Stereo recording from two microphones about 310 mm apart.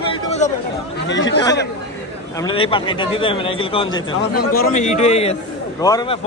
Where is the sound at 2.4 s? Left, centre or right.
Centre.